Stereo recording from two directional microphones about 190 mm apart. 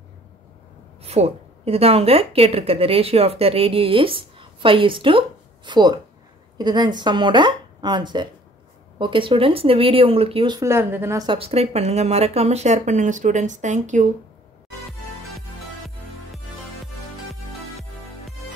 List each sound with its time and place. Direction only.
1.0 s a woman's voice: 35° right (ahead or behind); by 11.2 s 15° right (ahead or behind)
11.2 s a woman's voice: 30° right (ahead or behind)
16.8 s music: centre (ahead or behind)